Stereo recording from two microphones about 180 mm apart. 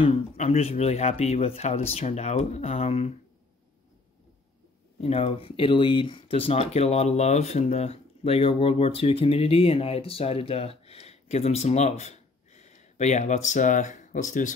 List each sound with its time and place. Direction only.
0.0 s speech: 35° left (ahead or behind)
5.0 s speech: 35° left (ahead or behind)